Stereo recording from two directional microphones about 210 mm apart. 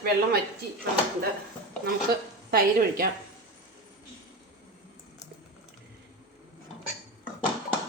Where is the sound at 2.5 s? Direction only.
45° right (ahead or behind).